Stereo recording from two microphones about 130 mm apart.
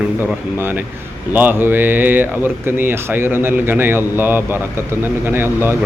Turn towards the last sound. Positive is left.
turn(degrees=-20)  # may be behind; listen again after turning